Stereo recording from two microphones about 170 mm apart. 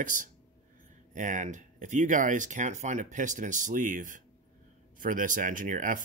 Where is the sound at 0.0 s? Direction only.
50° right (ahead or behind).